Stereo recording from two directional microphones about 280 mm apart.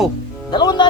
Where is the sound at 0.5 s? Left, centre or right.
Centre.